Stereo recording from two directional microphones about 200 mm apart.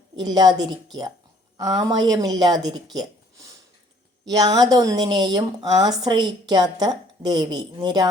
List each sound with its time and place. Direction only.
0.2 s a woman's voice: 20° right (ahead or behind)
2.9 s a sound: 20° right (ahead or behind)
4.3 s a woman's voice: 20° right (ahead or behind)